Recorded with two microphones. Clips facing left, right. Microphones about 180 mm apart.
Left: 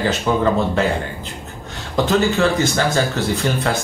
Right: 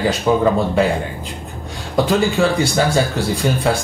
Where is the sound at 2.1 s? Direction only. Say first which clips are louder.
Even; 10° right (ahead or behind).